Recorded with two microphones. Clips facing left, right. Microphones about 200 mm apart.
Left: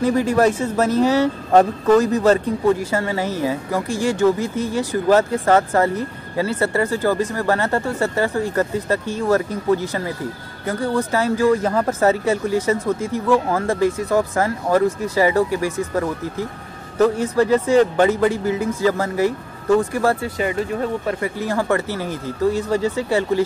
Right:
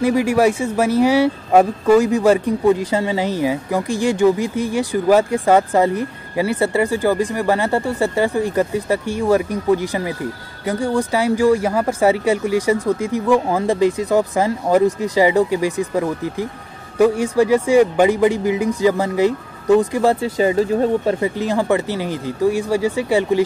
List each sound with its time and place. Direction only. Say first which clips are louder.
0.0 s a man's voice: right 1 dB; 10° right (ahead or behind)
20.3 s a man's voice: right 6 dB; 30° right (ahead or behind); by 23.4 s 15° right (ahead or behind)